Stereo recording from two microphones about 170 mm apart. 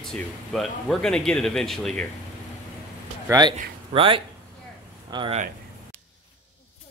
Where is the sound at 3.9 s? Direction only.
30° right (ahead or behind).